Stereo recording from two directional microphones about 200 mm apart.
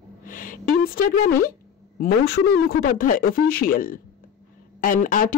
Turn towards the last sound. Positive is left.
turn(degrees=40)  # may be behind; listen again after turning